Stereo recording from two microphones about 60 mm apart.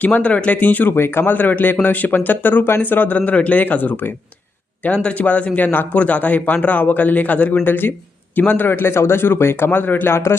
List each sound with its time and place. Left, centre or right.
0.0 s a man's voice: left
0.9 s a man's voice: left